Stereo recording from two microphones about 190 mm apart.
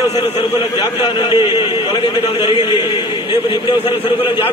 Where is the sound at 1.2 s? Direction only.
25° left (ahead or behind).